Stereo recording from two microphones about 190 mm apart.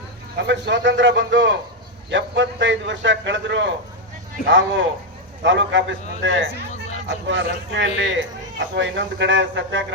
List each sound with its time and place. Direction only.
0.3 s a man's voice: 70° right (ahead or behind)